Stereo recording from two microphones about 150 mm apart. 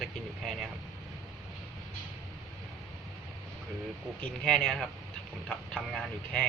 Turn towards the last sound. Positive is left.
turn(degrees=5)  # may be behind; listen again after turning